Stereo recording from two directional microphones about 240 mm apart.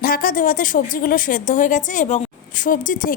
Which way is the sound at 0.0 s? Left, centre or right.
Left.